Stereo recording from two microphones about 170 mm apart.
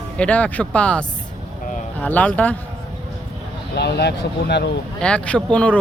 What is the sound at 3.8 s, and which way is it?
Speech, 80° left.